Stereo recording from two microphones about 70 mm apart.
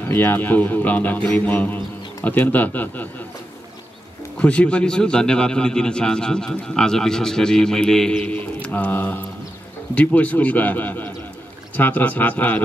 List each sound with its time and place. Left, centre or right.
0.1 s speech: left
4.4 s a man's voice: centre
8.2 s music: left
9.9 s speech: left